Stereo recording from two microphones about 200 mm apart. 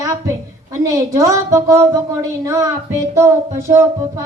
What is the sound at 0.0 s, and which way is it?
A woman's voice, 15° right (ahead or behind).